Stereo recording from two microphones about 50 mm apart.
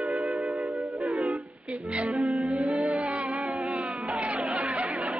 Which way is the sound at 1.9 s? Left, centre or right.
Right.